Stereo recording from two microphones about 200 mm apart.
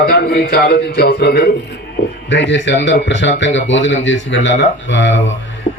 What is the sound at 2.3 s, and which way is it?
Speech, 60° left (ahead or behind).